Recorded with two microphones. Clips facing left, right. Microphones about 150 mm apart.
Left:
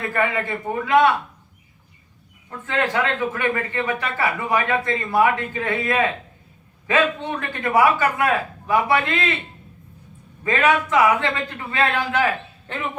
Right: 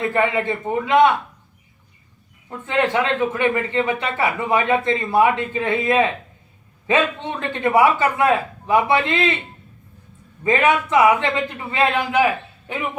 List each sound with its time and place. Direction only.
0.0 s speech: 25° right (ahead or behind)
2.5 s speech: 20° right (ahead or behind)
10.4 s speech: 20° right (ahead or behind)